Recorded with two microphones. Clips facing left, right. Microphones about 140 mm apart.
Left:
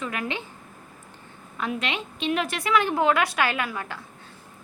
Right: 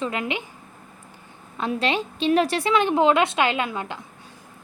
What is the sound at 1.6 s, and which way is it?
A woman's voice, 30° right (ahead or behind).